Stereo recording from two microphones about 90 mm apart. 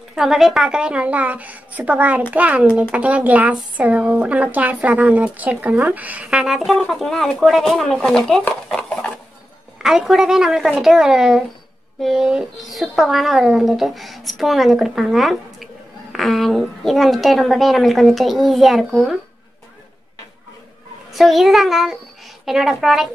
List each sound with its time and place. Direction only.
0.1 s a woman's voice: 5° right (ahead or behind)
21.1 s a woman's voice: centre (ahead or behind)